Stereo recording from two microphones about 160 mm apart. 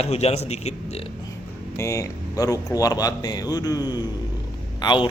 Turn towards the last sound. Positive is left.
turn(degrees=30)  # may be behind; listen again after turning